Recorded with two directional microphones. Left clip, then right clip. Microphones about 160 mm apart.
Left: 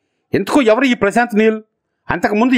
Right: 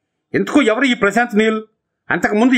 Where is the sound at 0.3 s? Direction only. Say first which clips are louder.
Left 2 dB; 30° left (ahead or behind).